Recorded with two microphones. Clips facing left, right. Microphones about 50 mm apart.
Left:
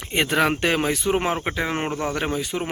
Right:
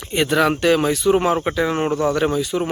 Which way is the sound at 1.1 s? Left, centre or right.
Centre.